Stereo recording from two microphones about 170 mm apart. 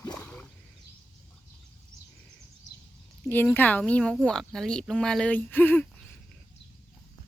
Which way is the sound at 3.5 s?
10° left (ahead or behind).